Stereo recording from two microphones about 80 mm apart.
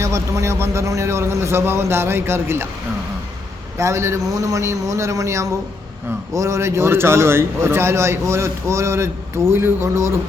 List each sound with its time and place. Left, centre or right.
0.0 s a man's voice: right
3.8 s a man's voice: right